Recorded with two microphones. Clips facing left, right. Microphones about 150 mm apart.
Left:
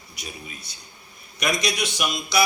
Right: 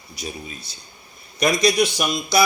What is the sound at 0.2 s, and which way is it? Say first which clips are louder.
A man's voice: right 6 dB; 30° right (ahead or behind).